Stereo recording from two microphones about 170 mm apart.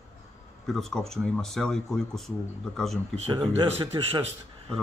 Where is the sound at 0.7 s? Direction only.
Centre (ahead or behind).